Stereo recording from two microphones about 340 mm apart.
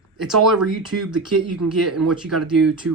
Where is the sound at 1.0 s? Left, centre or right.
Right.